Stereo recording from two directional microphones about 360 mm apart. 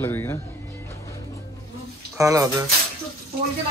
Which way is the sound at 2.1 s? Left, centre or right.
Centre.